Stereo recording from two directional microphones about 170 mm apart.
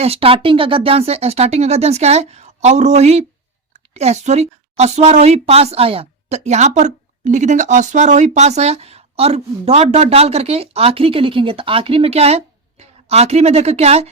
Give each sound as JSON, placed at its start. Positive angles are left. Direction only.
{"t": 0.0, "sound": "a woman's voice", "side_deg": -35}